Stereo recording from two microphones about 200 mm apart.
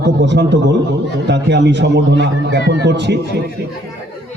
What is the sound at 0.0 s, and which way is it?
A man's voice, 60° right (ahead or behind).